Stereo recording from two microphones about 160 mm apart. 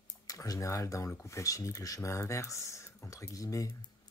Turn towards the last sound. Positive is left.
turn(degrees=20)  # may be behind; listen again after turning